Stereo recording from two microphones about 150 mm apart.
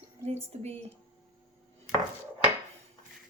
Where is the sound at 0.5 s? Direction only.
50° right (ahead or behind).